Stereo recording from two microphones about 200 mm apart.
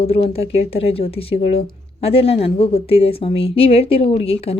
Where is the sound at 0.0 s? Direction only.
30° left (ahead or behind).